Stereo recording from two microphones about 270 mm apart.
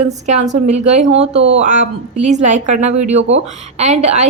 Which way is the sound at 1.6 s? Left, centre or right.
Right.